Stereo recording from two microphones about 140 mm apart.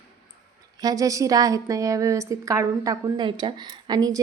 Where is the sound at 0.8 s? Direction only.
25° right (ahead or behind).